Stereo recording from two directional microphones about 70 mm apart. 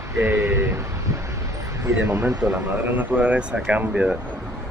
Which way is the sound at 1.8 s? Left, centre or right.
Right.